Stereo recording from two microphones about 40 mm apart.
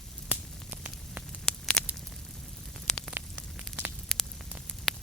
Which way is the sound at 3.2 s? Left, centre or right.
Right.